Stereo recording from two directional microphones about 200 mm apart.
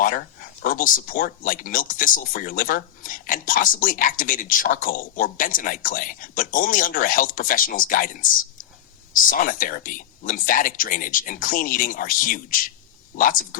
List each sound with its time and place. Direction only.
0.0 s speech: 45° left (ahead or behind)